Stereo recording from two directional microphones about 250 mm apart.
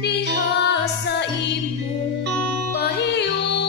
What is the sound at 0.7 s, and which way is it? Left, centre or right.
Music, left.